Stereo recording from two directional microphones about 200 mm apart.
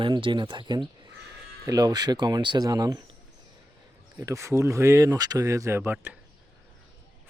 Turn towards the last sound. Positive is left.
turn(degrees=-10)  # may be behind; listen again after turning